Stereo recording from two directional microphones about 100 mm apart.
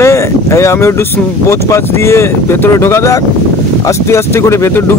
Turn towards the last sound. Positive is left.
turn(degrees=25)  # may be behind; listen again after turning